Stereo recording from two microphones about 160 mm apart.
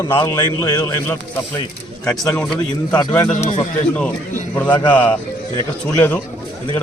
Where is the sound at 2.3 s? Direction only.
10° left (ahead or behind).